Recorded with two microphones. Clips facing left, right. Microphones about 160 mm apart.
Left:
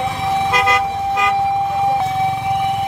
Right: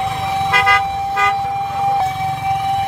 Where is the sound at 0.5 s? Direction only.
20° left (ahead or behind).